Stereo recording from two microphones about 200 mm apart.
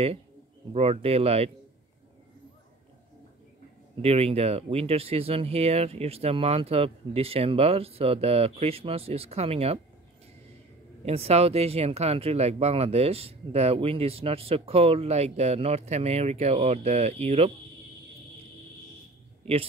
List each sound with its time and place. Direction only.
0.7 s speech: 30° right (ahead or behind)
4.0 s speech: 30° right (ahead or behind)
11.1 s speech: 30° right (ahead or behind)